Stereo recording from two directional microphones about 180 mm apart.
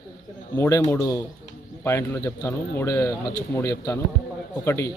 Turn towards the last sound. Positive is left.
turn(degrees=15)  # may be behind; listen again after turning